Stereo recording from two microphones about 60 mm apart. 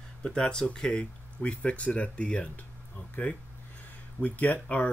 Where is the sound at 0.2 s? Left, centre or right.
Centre.